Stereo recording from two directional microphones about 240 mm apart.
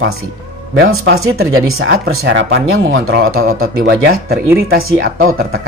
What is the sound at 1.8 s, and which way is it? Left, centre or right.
Speech, right.